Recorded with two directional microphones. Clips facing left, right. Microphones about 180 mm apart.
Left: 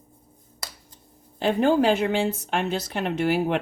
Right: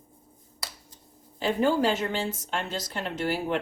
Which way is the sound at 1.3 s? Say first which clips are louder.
Left 4 dB; 60° left (ahead or behind).